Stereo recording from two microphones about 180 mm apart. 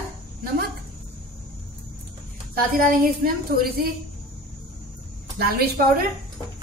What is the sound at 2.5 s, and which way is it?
A woman's voice, 50° right (ahead or behind).